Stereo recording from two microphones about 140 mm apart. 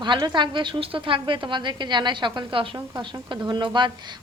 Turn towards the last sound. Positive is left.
turn(degrees=-35)  # may be behind; listen again after turning